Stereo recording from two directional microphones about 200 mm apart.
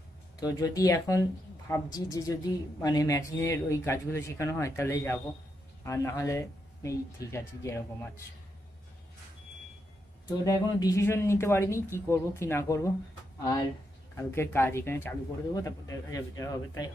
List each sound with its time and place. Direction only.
0.4 s speech: 15° left (ahead or behind)
10.2 s speech: 15° left (ahead or behind)
14.1 s speech: 10° left (ahead or behind)